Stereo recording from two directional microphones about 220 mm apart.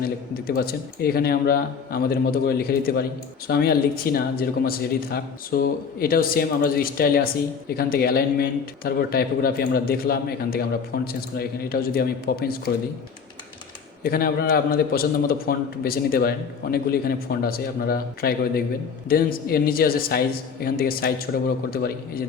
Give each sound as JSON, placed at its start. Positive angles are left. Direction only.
{"t": 0.0, "sound": "a man's voice", "side_deg": 45}
{"t": 14.0, "sound": "a man's voice", "side_deg": 45}